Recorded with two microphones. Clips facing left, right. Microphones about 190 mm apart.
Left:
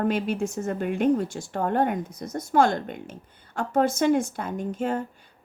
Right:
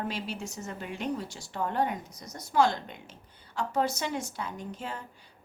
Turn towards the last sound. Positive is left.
turn(degrees=50)  # may be behind; listen again after turning